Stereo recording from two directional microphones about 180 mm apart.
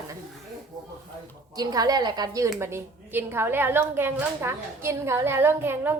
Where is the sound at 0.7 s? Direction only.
20° right (ahead or behind).